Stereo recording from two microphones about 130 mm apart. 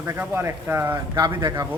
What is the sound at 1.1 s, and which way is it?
Speech, 30° right (ahead or behind).